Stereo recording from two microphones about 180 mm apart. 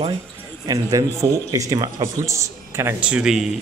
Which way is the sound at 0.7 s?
20° right (ahead or behind).